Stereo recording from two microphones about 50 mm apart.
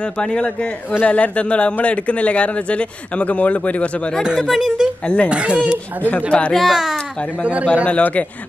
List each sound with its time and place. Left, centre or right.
0.2 s a man's voice: centre
4.5 s speech: centre
5.0 s a man's voice: left
5.3 s speech: right
6.0 s a man's voice: left
6.5 s speech: centre
7.9 s a man's voice: left